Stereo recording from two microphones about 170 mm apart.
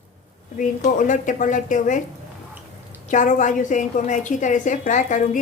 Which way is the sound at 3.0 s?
45° left (ahead or behind).